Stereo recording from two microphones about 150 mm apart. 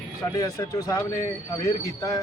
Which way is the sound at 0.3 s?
25° left (ahead or behind).